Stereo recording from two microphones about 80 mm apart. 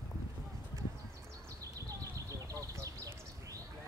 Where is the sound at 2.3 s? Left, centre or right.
Right.